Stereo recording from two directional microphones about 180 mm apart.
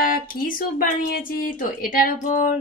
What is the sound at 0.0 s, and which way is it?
Speech, 50° left (ahead or behind).